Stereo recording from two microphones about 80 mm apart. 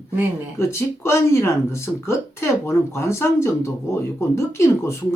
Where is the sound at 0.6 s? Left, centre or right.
Left.